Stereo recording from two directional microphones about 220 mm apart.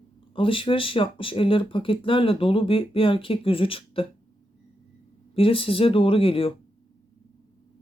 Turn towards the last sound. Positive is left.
turn(degrees=25)  # may be behind; listen again after turning